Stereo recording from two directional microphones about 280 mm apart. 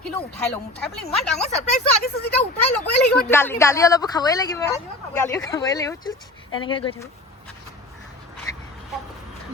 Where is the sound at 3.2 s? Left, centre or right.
Centre.